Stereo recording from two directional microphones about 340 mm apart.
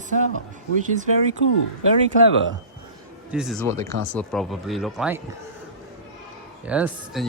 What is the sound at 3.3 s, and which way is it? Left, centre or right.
Speech, centre.